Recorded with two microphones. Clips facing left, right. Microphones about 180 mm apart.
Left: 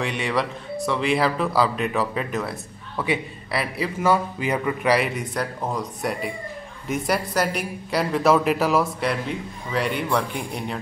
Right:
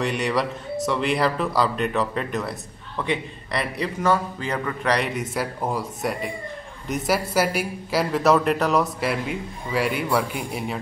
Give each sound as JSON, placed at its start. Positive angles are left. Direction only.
{"t": 0.0, "sound": "a man's voice", "side_deg": 0}